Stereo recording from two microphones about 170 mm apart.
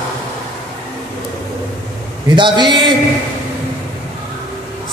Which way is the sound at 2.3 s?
30° right (ahead or behind).